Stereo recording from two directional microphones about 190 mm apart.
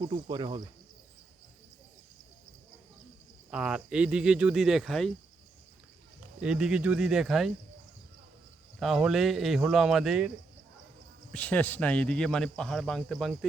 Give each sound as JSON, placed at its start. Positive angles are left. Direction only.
{"t": 0.0, "sound": "speech", "side_deg": -25}
{"t": 3.5, "sound": "speech", "side_deg": -5}
{"t": 6.4, "sound": "speech", "side_deg": -5}
{"t": 8.8, "sound": "speech", "side_deg": 0}
{"t": 11.3, "sound": "speech", "side_deg": 10}